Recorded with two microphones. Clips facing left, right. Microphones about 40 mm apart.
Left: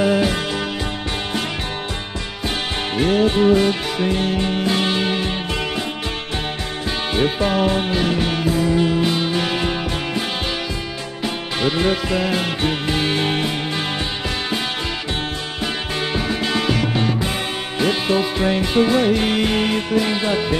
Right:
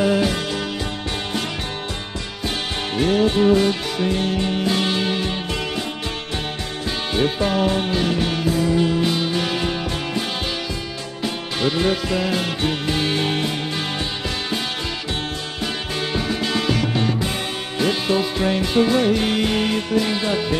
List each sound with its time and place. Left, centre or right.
0.0 s music: centre
3.0 s music: centre
7.2 s music: left
11.6 s music: left
16.4 s music: left